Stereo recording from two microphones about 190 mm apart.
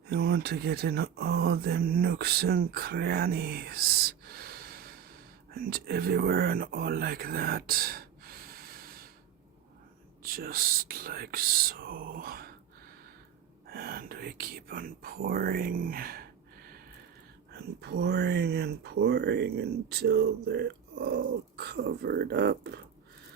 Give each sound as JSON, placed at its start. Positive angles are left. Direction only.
{"t": 0.1, "sound": "speech", "side_deg": -60}
{"t": 10.2, "sound": "speech", "side_deg": -50}
{"t": 13.7, "sound": "speech", "side_deg": -50}
{"t": 17.5, "sound": "speech", "side_deg": -60}